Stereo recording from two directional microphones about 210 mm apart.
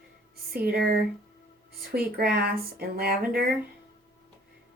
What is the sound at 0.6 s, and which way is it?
Speech, 45° right (ahead or behind).